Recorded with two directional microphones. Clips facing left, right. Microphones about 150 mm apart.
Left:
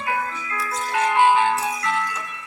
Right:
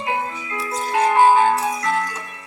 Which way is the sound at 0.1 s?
25° right (ahead or behind).